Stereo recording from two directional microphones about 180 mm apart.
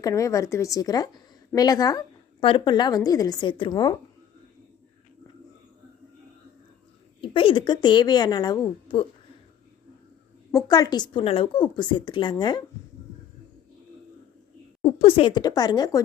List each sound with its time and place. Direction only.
0.0 s a woman's voice: 15° left (ahead or behind)
7.2 s a woman's voice: 30° left (ahead or behind)
10.5 s a woman's voice: 20° left (ahead or behind)
14.8 s a woman's voice: 30° left (ahead or behind)